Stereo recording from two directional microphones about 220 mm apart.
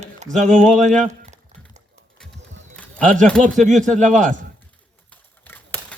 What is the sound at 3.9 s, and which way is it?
Speech, 5° left (ahead or behind).